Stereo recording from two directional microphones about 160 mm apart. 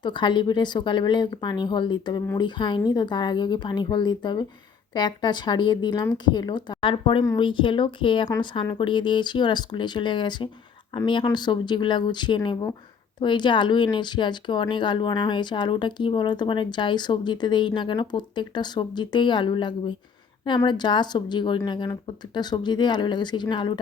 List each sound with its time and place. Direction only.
0.0 s speech: 30° left (ahead or behind)